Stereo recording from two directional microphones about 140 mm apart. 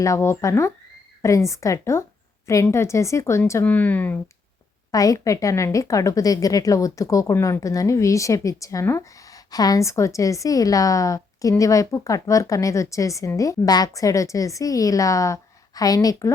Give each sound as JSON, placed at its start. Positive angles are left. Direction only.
{"t": 0.0, "sound": "a woman's voice", "side_deg": 20}
{"t": 4.9, "sound": "a woman's voice", "side_deg": 25}